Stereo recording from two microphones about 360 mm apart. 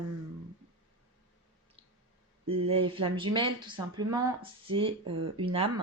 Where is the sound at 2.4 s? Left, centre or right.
Centre.